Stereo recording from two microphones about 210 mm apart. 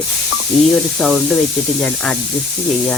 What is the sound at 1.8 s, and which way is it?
Speech, 5° left (ahead or behind).